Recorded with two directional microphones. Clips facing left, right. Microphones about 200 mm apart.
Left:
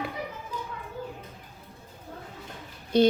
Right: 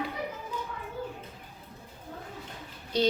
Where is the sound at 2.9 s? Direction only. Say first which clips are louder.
Left 6 dB; 55° left (ahead or behind).